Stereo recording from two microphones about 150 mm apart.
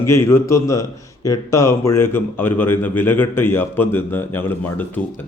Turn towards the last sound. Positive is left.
turn(degrees=10)  # may be behind; listen again after turning